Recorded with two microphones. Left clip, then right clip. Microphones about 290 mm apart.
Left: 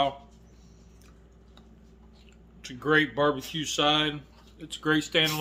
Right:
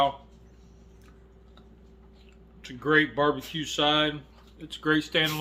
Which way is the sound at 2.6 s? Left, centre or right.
Centre.